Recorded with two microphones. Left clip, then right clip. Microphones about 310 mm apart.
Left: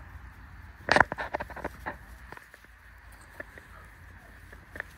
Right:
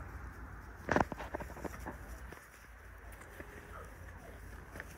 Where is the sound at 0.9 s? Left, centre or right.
Right.